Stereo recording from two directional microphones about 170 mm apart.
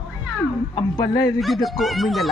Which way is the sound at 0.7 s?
20° left (ahead or behind).